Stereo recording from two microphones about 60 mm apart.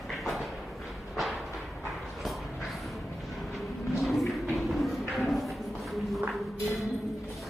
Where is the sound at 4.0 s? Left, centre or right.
Centre.